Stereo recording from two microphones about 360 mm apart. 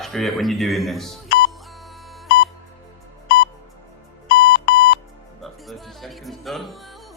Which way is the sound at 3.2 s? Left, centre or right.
Left.